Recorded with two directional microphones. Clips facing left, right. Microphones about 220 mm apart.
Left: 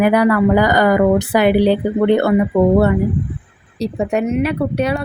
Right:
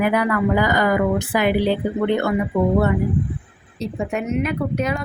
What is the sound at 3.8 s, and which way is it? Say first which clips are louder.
Speech: left 6 dB; 35° left (ahead or behind).